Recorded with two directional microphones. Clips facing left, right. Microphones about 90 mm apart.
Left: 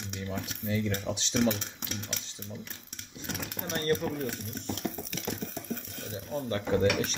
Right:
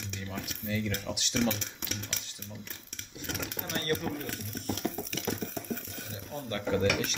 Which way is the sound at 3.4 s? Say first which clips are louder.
Left 4 dB; 20° left (ahead or behind).